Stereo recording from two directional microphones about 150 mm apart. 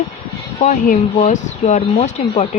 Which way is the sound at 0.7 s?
55° left (ahead or behind).